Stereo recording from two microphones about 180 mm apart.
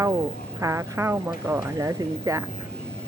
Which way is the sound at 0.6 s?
15° right (ahead or behind).